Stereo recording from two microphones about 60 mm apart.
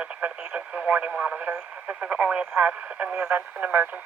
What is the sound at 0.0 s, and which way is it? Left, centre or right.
Speech, right.